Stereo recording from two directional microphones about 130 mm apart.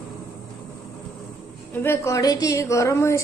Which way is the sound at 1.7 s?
20° left (ahead or behind).